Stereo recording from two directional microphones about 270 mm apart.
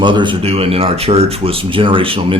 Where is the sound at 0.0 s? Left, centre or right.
Centre.